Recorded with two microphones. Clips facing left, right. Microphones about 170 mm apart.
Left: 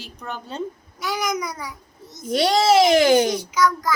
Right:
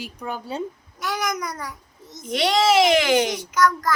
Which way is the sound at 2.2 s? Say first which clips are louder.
Left 2 dB; 35° left (ahead or behind).